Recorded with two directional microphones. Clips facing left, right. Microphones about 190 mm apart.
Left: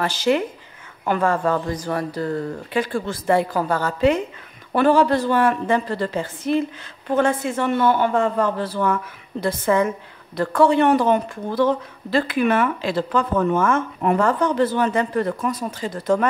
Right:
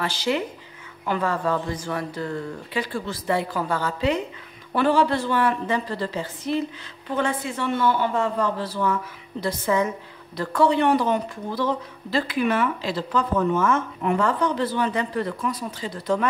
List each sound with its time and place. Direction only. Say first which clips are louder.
0.0 s speech: left 5 dB; 45° left (ahead or behind)